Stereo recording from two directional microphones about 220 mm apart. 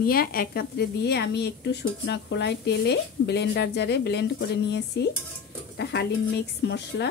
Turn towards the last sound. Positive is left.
turn(degrees=50)  # may be behind; listen again after turning